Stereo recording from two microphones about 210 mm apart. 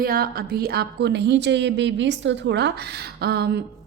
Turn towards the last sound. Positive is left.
turn(degrees=-50)  # may be behind; listen again after turning